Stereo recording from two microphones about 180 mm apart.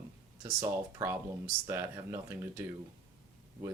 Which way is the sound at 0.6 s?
20° right (ahead or behind).